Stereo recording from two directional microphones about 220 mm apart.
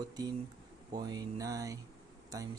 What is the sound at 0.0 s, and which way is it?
Speech, 20° right (ahead or behind).